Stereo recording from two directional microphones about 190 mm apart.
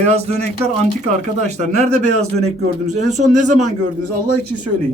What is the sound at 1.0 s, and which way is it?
Speech, 35° right (ahead or behind).